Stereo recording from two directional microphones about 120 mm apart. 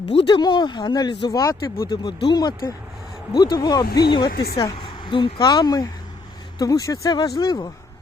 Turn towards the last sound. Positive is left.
turn(degrees=35)  # may be behind; listen again after turning